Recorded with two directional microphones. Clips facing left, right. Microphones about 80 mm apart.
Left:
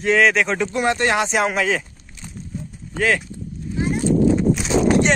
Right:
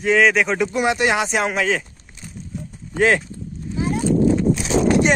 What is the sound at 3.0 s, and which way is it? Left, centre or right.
Speech, right.